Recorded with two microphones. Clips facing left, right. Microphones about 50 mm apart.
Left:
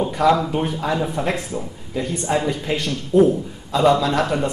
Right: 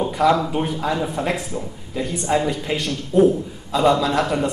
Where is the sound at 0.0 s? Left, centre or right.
Centre.